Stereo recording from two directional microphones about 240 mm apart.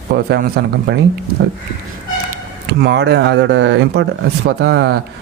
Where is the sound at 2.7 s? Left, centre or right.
Right.